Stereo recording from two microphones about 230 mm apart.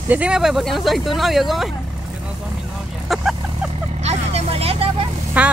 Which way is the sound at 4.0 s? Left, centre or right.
Right.